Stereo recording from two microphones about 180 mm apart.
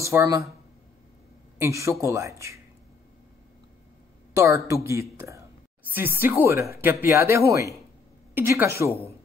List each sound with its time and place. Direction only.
0.0 s speech: 15° right (ahead or behind)
1.6 s speech: 15° right (ahead or behind)
4.4 s speech: 15° right (ahead or behind)
5.9 s speech: 10° right (ahead or behind)